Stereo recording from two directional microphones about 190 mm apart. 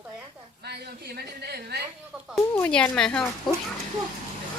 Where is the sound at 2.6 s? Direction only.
5° left (ahead or behind).